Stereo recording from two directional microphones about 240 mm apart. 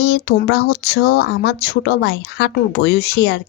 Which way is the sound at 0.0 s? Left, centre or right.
Left.